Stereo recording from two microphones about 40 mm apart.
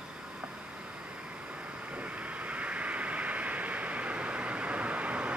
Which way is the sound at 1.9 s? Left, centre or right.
Right.